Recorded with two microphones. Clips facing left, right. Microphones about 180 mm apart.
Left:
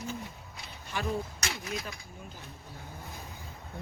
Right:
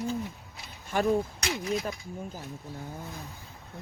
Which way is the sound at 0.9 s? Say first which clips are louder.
Right 8 dB; 50° right (ahead or behind).